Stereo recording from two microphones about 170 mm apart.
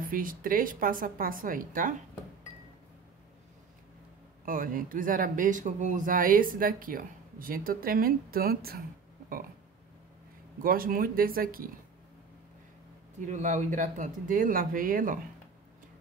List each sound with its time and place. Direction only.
0.0 s speech: 55° right (ahead or behind)
4.5 s speech: 55° right (ahead or behind)
10.6 s speech: 55° right (ahead or behind)
13.2 s speech: 45° right (ahead or behind)